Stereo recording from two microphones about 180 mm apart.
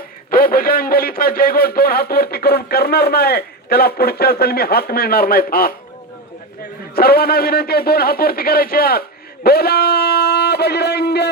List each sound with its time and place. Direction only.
0.3 s a man's voice: 55° left (ahead or behind)
6.9 s a man's voice: 60° left (ahead or behind)